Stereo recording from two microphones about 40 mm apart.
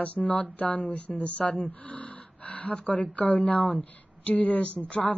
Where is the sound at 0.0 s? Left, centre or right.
Left.